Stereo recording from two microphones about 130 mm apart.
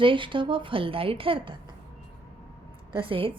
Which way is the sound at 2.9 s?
40° right (ahead or behind).